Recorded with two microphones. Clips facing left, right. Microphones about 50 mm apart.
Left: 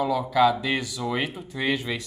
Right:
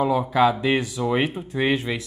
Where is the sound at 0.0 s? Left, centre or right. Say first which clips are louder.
Right 2 dB; right.